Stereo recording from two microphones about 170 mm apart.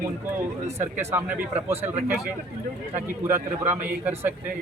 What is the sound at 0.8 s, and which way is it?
Speech, 15° right (ahead or behind).